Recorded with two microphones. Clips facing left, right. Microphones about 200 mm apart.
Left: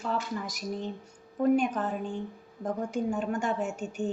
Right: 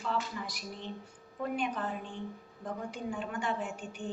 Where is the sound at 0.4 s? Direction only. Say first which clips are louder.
Left 7 dB; 45° left (ahead or behind).